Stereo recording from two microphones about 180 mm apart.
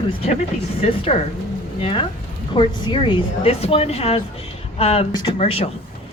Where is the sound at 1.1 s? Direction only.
35° left (ahead or behind).